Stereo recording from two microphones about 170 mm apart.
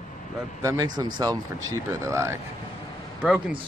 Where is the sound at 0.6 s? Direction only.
20° right (ahead or behind).